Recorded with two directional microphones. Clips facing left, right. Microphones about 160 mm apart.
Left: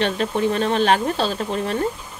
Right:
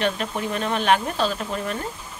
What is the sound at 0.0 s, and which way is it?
Speech, 30° left (ahead or behind).